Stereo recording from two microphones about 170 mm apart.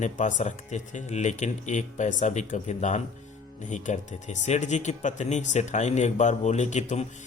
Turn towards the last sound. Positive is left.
turn(degrees=45)  # may be behind; listen again after turning